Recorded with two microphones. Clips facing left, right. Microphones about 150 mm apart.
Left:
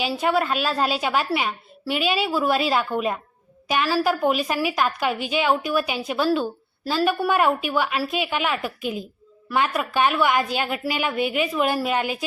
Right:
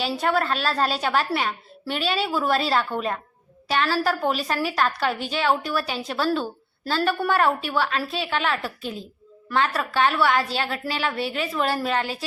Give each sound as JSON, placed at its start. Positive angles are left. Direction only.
{"t": 0.0, "sound": "a woman's voice", "side_deg": 10}